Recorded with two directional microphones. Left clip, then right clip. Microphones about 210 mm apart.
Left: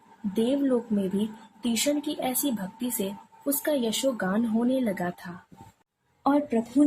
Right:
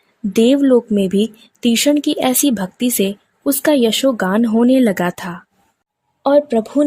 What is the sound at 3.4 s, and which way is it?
Speech, 45° right (ahead or behind).